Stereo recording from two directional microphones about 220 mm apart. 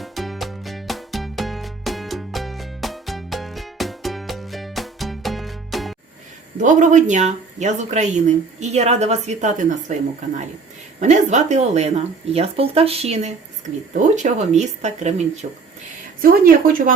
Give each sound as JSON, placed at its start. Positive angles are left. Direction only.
{"t": 0.0, "sound": "music", "side_deg": 0}
{"t": 6.6, "sound": "a woman's voice", "side_deg": -35}